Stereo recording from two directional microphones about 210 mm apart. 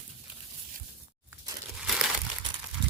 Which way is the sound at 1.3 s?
5° right (ahead or behind).